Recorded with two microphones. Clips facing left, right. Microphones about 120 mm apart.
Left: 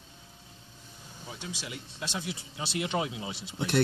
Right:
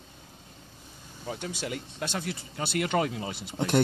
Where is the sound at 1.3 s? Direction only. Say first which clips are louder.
Right 7 dB; 55° right (ahead or behind).